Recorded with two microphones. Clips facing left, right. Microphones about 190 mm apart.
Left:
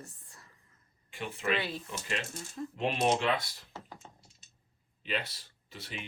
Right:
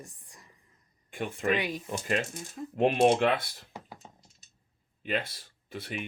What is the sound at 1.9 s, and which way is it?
Speech, 50° right (ahead or behind).